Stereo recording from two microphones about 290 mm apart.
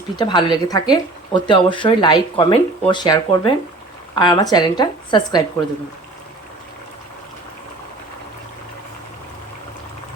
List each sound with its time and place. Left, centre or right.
0.2 s speech: centre